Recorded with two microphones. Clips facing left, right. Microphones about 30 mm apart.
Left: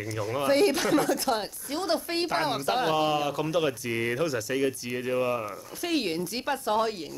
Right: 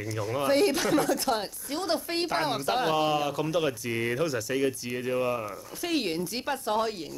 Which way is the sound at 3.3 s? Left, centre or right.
Left.